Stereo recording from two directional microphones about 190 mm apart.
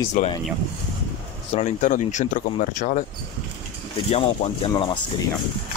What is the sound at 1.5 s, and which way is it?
Speech, 35° left (ahead or behind).